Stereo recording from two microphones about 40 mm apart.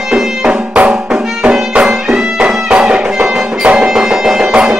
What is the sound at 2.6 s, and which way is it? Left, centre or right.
Music, right.